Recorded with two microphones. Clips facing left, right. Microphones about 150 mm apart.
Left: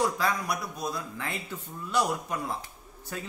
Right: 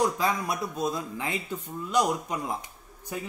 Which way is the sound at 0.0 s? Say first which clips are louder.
Right 2 dB; 20° right (ahead or behind).